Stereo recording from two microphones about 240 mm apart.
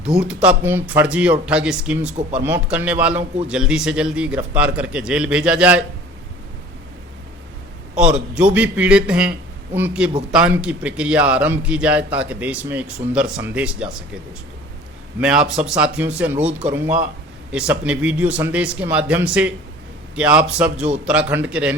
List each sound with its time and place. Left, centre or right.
0.0 s a man's voice: centre
7.9 s a man's voice: centre
15.2 s a man's voice: centre
20.8 s a man's voice: right
21.1 s a man's voice: centre